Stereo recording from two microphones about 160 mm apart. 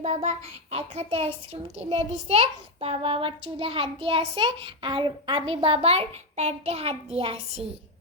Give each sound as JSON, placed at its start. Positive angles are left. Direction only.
{"t": 0.0, "sound": "a child's voice", "side_deg": -45}